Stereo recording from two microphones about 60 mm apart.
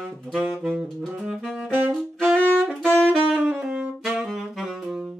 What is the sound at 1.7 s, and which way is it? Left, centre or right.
Music, right.